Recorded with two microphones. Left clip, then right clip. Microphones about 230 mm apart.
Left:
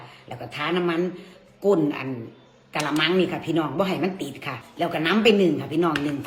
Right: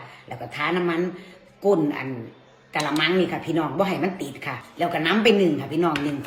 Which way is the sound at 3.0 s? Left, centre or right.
Centre.